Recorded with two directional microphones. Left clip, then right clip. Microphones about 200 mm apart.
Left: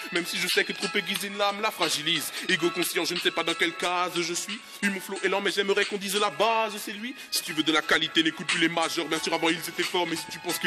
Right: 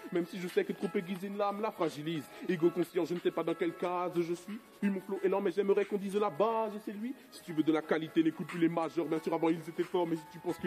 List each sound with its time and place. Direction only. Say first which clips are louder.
0.1 s music: left 7 dB; 5° left (ahead or behind)
3.3 s music: left 7 dB; 5° left (ahead or behind)